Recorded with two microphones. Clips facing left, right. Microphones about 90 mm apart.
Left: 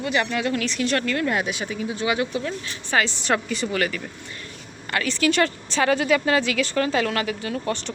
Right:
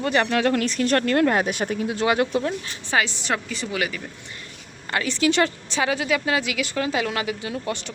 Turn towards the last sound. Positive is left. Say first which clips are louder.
# left 1 dB
turn(degrees=-15)  # may be behind; listen again after turning